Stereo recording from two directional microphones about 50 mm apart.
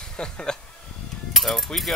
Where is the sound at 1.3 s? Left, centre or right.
Centre.